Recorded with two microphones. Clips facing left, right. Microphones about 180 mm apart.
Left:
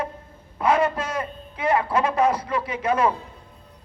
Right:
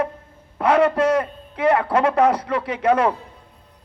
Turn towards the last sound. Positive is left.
turn(degrees=-70)  # may be behind; listen again after turning